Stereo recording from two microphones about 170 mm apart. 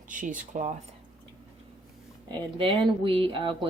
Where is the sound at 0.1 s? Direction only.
50° right (ahead or behind).